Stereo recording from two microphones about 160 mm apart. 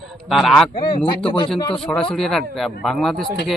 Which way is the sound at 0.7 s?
30° left (ahead or behind).